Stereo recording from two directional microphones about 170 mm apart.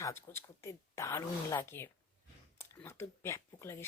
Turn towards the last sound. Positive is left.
turn(degrees=15)  # may be behind; listen again after turning